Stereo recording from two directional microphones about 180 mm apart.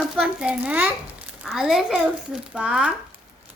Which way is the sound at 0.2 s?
5° right (ahead or behind).